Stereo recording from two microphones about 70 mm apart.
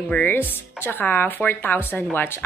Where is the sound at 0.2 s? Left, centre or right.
Left.